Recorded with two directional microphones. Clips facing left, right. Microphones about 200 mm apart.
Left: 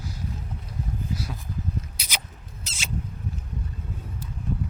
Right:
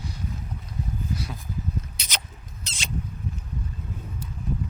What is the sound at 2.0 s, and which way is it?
Mouse, 10° left (ahead or behind).